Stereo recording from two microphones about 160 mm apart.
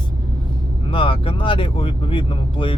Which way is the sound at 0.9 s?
35° left (ahead or behind).